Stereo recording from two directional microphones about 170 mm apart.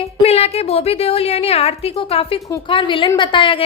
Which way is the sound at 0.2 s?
35° left (ahead or behind).